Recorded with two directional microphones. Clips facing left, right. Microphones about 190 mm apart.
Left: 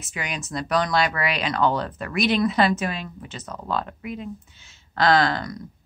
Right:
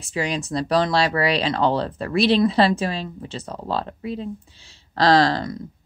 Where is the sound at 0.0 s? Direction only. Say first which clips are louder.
Right 7 dB; 30° right (ahead or behind).